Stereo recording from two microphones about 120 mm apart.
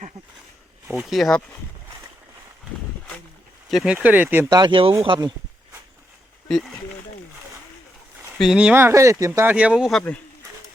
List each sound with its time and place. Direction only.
0.9 s speech: centre (ahead or behind)
3.7 s speech: centre (ahead or behind)
3.9 s speech: 15° right (ahead or behind)
4.4 s speech: 40° right (ahead or behind)
6.5 s speech: centre (ahead or behind)
8.4 s speech: 5° right (ahead or behind)
8.7 s speech: 20° right (ahead or behind)
9.5 s speech: 10° right (ahead or behind)